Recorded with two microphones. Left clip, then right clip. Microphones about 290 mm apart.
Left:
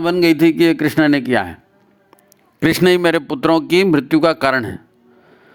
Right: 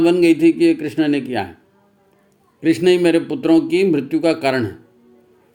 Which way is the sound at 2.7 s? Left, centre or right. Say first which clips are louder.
Even; left.